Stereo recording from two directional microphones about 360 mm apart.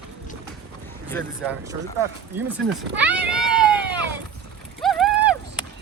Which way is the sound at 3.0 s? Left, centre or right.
Centre.